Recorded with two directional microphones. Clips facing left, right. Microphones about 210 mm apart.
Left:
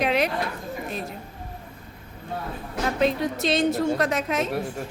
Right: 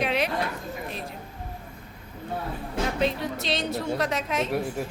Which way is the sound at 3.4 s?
45° left (ahead or behind).